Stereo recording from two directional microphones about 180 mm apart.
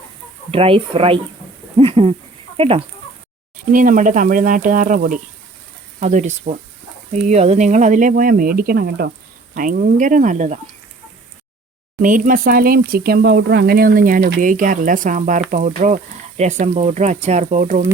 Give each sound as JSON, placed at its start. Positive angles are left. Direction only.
{"t": 0.5, "sound": "speech", "side_deg": -30}
{"t": 3.7, "sound": "speech", "side_deg": -50}
{"t": 11.9, "sound": "speech", "side_deg": -45}